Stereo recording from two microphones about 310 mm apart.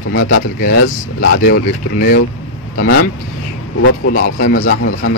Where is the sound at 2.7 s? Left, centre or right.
Left.